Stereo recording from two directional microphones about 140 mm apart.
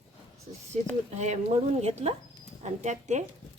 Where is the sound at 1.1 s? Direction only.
55° right (ahead or behind).